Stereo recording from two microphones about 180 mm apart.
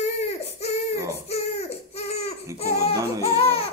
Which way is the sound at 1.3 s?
35° left (ahead or behind).